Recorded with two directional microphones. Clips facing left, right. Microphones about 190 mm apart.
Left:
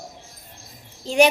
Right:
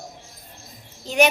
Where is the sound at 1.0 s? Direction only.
30° left (ahead or behind).